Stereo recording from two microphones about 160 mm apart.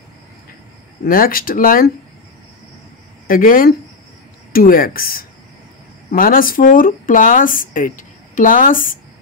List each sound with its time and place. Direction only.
1.0 s speech: 65° left (ahead or behind)
3.3 s speech: 60° left (ahead or behind)